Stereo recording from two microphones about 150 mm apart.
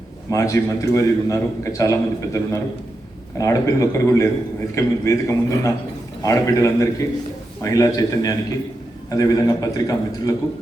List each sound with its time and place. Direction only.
0.3 s a man's voice: 20° left (ahead or behind)